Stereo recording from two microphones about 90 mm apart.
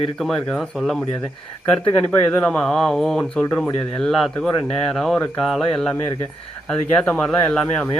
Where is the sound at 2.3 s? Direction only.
10° left (ahead or behind).